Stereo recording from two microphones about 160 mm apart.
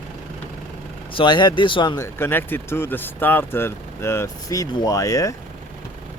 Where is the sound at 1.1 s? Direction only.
30° left (ahead or behind).